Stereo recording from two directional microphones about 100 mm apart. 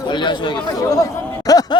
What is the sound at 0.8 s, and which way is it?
Speech, 35° left (ahead or behind).